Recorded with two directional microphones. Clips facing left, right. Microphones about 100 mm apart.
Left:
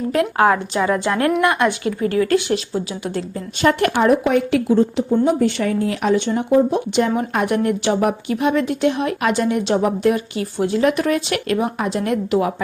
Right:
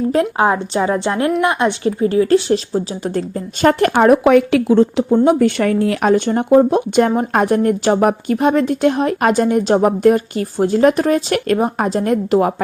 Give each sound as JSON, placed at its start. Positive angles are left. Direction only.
{"t": 0.3, "sound": "a woman's voice", "side_deg": -20}
{"t": 4.2, "sound": "a woman's voice", "side_deg": -90}